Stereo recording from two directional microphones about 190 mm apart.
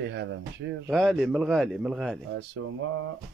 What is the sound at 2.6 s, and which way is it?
Speech, 75° right (ahead or behind).